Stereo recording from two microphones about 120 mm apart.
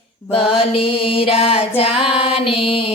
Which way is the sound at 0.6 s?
50° left (ahead or behind).